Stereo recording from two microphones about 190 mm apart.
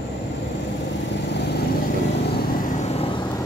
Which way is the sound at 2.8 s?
30° left (ahead or behind).